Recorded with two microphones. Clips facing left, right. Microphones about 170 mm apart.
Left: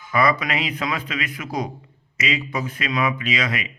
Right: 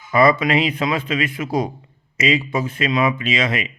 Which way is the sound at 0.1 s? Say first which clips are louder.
Right 5 dB; 25° right (ahead or behind).